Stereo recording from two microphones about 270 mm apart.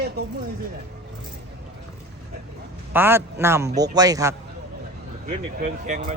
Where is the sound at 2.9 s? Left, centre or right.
Centre.